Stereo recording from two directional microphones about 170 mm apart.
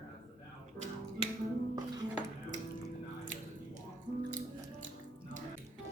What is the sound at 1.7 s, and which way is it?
Music, 25° right (ahead or behind).